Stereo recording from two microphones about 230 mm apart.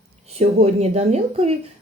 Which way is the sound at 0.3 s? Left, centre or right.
Right.